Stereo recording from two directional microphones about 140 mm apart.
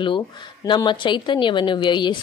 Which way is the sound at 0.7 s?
35° left (ahead or behind).